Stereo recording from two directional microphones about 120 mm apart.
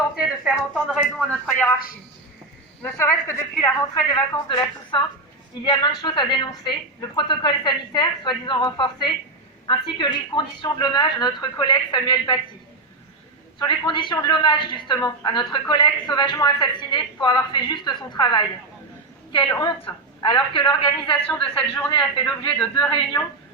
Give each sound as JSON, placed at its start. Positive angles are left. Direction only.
{"t": 0.2, "sound": "speech", "side_deg": -5}
{"t": 1.2, "sound": "a man's voice", "side_deg": 5}
{"t": 2.8, "sound": "speech", "side_deg": 20}
{"t": 4.4, "sound": "a woman's voice", "side_deg": 40}
{"t": 13.6, "sound": "a woman's voice", "side_deg": 40}
{"t": 19.5, "sound": "a woman's voice", "side_deg": 35}
{"t": 19.8, "sound": "a woman's voice", "side_deg": 45}
{"t": 21.2, "sound": "a man's voice", "side_deg": 5}
{"t": 21.8, "sound": "a woman's voice", "side_deg": 40}
{"t": 22.2, "sound": "a man's voice", "side_deg": 10}